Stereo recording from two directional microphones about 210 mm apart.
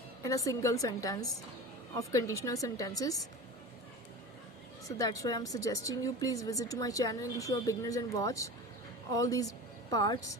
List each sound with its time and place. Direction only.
0.2 s speech: 15° left (ahead or behind)
4.9 s a woman's voice: 15° left (ahead or behind)